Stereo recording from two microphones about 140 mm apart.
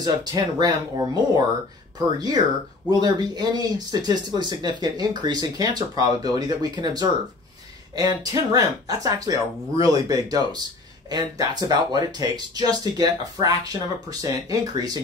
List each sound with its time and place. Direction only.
0.0 s speech: 30° right (ahead or behind)